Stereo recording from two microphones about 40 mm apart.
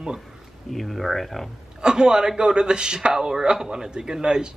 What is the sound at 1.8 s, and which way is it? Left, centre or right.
A man's voice, right.